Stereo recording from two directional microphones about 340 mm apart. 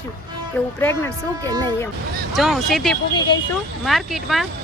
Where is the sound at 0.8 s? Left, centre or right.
Centre.